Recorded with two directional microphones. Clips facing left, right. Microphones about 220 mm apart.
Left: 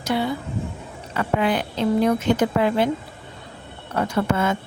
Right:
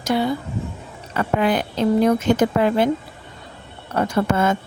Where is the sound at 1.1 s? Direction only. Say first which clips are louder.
Right 2 dB; 45° right (ahead or behind).